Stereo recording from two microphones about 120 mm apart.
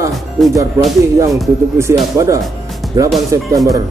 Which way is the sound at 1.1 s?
25° right (ahead or behind).